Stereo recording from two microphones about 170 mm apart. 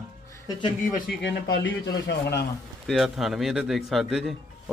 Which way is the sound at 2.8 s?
Centre (ahead or behind).